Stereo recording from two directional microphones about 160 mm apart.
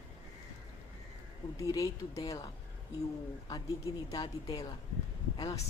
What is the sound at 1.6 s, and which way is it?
Speech, 20° left (ahead or behind).